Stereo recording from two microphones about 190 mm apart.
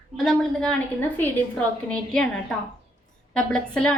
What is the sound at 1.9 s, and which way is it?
A woman's voice, 5° left (ahead or behind).